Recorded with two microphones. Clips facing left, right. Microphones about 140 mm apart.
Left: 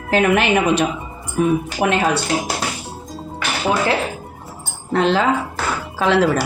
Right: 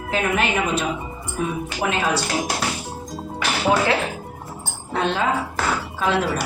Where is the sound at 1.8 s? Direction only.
65° left (ahead or behind).